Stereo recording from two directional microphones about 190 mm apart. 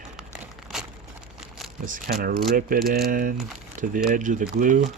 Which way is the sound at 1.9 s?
45° right (ahead or behind).